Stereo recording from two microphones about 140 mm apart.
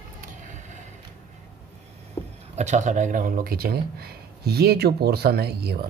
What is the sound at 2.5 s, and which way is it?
Speech, 55° right (ahead or behind).